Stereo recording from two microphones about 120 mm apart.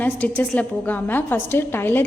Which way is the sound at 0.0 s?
10° left (ahead or behind).